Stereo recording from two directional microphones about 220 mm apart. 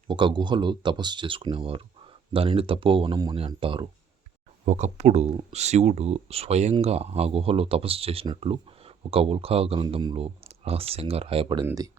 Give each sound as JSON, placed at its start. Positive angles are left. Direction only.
{"t": 0.1, "sound": "speech", "side_deg": -20}